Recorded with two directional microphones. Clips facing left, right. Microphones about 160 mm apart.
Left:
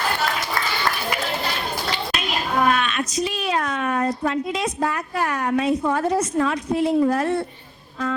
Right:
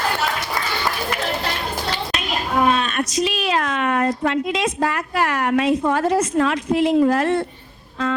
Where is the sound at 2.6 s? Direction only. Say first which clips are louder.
Right 2 dB; 25° right (ahead or behind).